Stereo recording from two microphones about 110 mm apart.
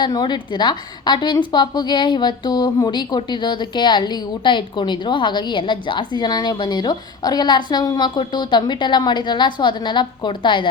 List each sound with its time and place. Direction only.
0.0 s a woman's voice: 40° left (ahead or behind)